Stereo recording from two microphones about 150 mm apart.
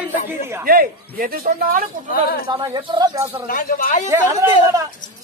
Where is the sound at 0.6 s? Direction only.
70° right (ahead or behind).